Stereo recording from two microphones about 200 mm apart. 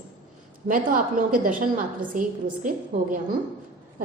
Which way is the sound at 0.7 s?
45° right (ahead or behind).